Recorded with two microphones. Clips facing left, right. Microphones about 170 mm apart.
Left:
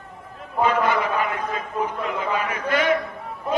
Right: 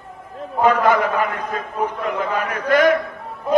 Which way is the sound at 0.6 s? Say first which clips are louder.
Right 5 dB; 45° right (ahead or behind).